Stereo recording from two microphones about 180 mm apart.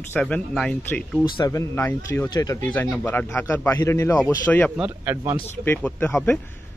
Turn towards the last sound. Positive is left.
turn(degrees=5)  # may be behind; listen again after turning